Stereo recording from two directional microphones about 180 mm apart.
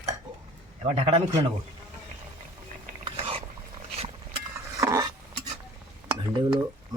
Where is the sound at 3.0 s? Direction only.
30° right (ahead or behind).